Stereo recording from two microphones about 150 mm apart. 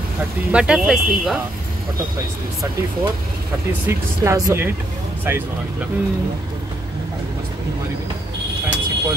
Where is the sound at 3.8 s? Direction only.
20° right (ahead or behind).